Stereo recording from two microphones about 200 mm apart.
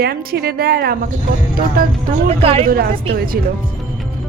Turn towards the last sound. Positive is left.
turn(degrees=-45)  # may be behind; listen again after turning